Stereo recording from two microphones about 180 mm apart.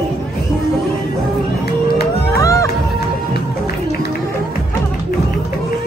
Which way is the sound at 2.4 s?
15° left (ahead or behind).